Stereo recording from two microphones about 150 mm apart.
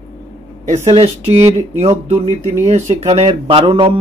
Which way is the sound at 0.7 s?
45° right (ahead or behind).